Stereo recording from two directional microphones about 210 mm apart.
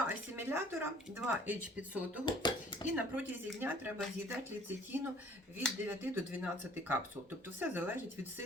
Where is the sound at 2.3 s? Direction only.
20° left (ahead or behind).